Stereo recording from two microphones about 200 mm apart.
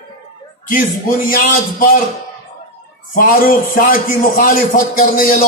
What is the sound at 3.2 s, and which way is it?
A man's voice, 45° left (ahead or behind).